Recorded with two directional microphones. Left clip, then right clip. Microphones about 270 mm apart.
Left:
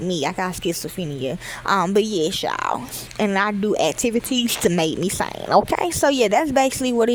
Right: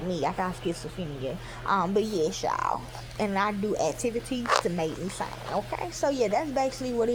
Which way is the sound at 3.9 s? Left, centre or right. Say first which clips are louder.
Left 8 dB; left.